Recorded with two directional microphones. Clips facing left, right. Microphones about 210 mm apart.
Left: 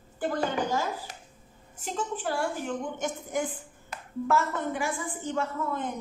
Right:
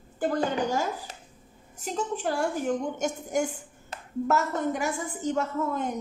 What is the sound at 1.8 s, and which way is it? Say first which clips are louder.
A woman's voice: right 2 dB; 40° right (ahead or behind).